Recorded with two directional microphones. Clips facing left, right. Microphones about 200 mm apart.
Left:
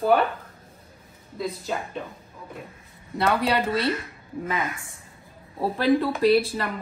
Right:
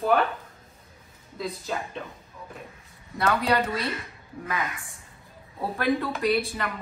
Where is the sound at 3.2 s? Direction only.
30° left (ahead or behind).